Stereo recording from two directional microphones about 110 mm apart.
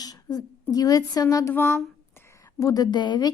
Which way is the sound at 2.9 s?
45° left (ahead or behind).